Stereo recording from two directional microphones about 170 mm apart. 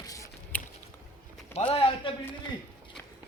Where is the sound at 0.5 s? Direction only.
10° left (ahead or behind).